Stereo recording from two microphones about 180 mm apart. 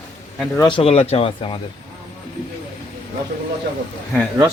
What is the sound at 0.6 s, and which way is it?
Speech, 25° left (ahead or behind).